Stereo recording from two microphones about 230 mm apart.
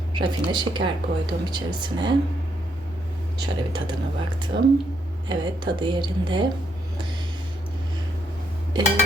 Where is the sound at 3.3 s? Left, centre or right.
Centre.